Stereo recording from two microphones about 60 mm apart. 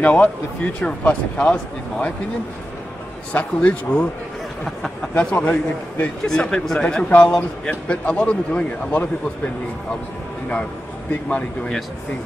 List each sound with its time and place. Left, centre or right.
0.0 s speech: left
3.3 s speech: centre
4.6 s speech: centre
5.1 s speech: left